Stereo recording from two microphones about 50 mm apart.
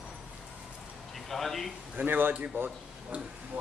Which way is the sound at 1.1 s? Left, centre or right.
Centre.